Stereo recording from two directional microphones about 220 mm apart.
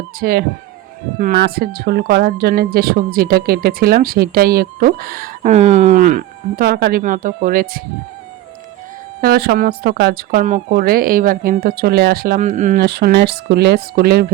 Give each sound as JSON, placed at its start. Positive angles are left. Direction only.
{"t": 0.2, "sound": "speech", "side_deg": -40}
{"t": 7.0, "sound": "speech", "side_deg": -35}
{"t": 9.2, "sound": "speech", "side_deg": -45}